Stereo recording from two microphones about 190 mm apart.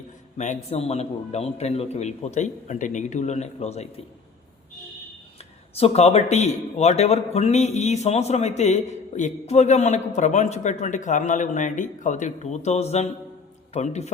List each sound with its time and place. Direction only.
0.3 s speech: 40° left (ahead or behind)
5.7 s speech: 35° left (ahead or behind)